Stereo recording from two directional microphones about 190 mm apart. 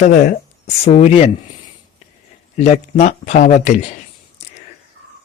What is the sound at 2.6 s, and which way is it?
Speech, 35° left (ahead or behind).